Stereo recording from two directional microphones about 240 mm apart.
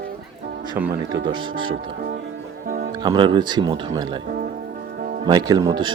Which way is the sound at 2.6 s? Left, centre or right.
Right.